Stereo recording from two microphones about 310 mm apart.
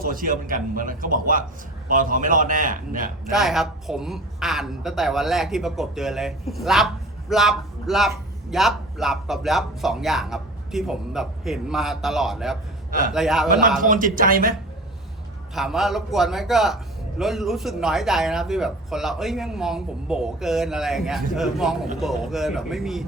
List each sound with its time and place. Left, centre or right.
0.0 s a man's voice: right
3.4 s a man's voice: centre
13.8 s a man's voice: right
15.5 s a man's voice: centre